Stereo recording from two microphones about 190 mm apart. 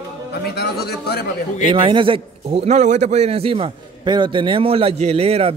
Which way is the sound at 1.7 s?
25° right (ahead or behind).